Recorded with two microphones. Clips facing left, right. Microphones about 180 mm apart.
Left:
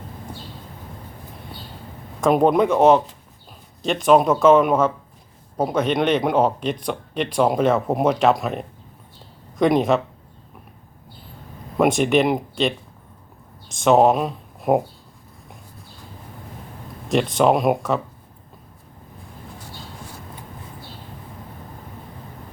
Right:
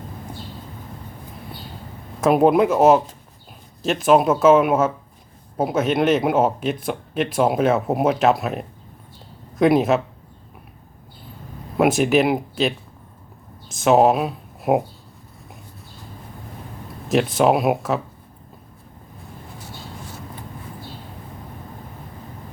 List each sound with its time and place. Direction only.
2.2 s speech: 5° right (ahead or behind)
11.8 s speech: 5° right (ahead or behind)
17.1 s speech: 5° right (ahead or behind)